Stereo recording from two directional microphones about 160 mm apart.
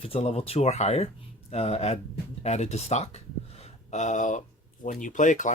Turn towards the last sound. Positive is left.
turn(degrees=50)  # may be behind; listen again after turning